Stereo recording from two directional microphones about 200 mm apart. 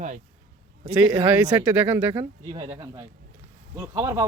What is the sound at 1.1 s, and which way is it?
Speech, 5° right (ahead or behind).